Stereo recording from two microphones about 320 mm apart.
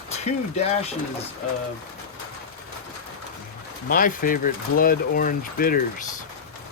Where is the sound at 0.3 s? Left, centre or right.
Left.